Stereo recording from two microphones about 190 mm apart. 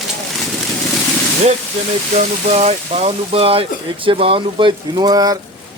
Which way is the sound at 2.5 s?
35° right (ahead or behind).